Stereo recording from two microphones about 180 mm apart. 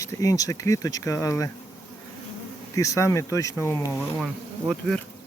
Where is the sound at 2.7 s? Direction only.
15° left (ahead or behind).